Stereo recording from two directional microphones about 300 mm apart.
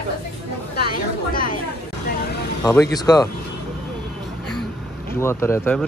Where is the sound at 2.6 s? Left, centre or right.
Centre.